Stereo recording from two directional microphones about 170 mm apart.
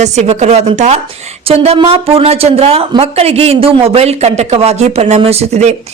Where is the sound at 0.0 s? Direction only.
40° right (ahead or behind).